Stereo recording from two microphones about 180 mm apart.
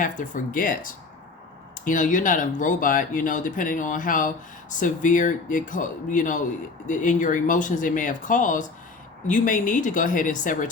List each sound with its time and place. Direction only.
0.0 s speech: 45° left (ahead or behind)